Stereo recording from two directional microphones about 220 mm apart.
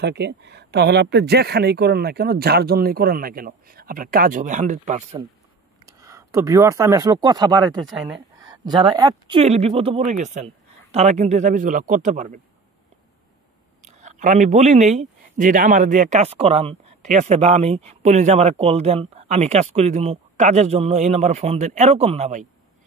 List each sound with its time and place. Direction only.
0.0 s speech: 50° right (ahead or behind); by 5.2 s 30° right (ahead or behind)
5.9 s speech: 15° right (ahead or behind); by 12.4 s 35° right (ahead or behind)
13.8 s speech: 30° right (ahead or behind)